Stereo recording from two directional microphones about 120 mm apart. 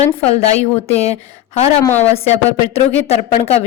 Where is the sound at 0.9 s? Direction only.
65° left (ahead or behind).